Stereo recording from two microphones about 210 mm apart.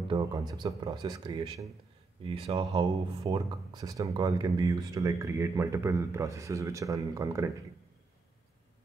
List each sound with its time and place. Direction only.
0.1 s speech: 20° right (ahead or behind)